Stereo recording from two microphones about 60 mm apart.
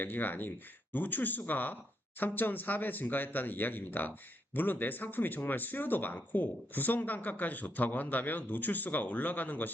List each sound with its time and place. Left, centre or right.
0.0 s speech: left